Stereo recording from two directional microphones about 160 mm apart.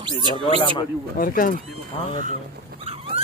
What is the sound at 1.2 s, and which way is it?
Speech, 60° left (ahead or behind).